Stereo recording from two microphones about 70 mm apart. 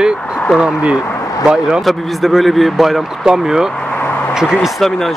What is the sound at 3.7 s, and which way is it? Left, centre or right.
Vehicle, centre.